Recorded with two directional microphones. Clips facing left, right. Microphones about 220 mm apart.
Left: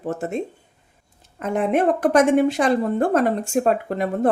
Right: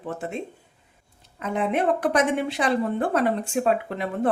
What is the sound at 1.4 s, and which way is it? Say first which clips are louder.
A woman's voice: left 4 dB; 50° left (ahead or behind).